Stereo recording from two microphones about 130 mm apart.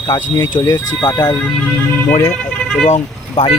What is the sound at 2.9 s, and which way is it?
Speech, 50° left (ahead or behind).